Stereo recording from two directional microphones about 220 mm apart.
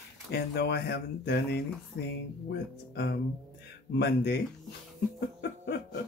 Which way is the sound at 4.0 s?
50° left (ahead or behind).